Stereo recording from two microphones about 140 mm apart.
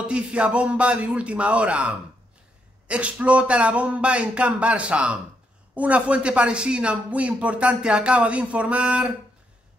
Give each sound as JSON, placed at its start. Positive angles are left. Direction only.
{"t": 0.1, "sound": "speech", "side_deg": -10}